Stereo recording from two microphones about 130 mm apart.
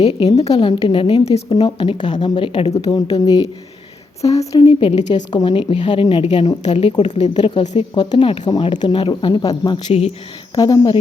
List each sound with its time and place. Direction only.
0.0 s a woman's voice: 50° left (ahead or behind)
0.5 s a woman's voice: 40° left (ahead or behind)
1.6 s speech: 40° left (ahead or behind)
3.2 s a woman's voice: 30° left (ahead or behind)
4.7 s a woman's voice: 45° left (ahead or behind)
6.2 s a woman's voice: 60° left (ahead or behind)
7.2 s speech: 35° left (ahead or behind)
9.4 s a woman's voice: 30° left (ahead or behind)
9.7 s a woman's voice: 50° left (ahead or behind)
10.5 s a woman's voice: 30° left (ahead or behind)